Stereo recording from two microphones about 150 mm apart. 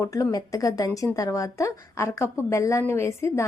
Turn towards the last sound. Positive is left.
turn(degrees=20)  # may be behind; listen again after turning